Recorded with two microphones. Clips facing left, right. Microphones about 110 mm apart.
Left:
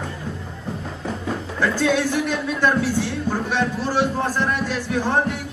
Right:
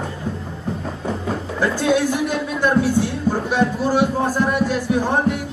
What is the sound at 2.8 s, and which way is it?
Speech, 45° right (ahead or behind).